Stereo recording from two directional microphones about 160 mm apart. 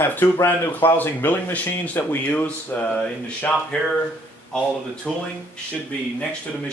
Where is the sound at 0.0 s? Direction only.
15° left (ahead or behind).